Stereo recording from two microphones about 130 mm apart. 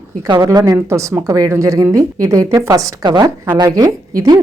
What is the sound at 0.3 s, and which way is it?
Speech, 30° right (ahead or behind).